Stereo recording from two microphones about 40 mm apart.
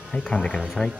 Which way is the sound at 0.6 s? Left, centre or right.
Centre.